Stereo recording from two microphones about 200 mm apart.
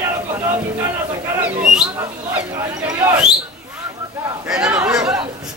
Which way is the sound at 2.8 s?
10° right (ahead or behind).